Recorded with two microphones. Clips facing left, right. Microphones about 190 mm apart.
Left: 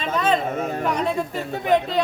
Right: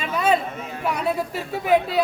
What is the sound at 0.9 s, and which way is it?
Speech, 5° right (ahead or behind).